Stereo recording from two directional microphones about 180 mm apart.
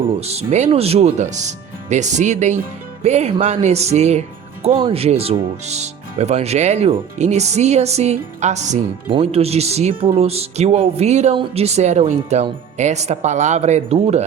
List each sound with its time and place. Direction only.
0.2 s speech: 35° right (ahead or behind)